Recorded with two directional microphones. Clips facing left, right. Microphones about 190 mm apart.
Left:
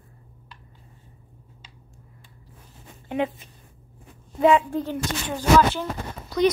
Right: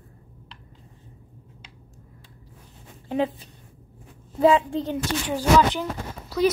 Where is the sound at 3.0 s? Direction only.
30° right (ahead or behind).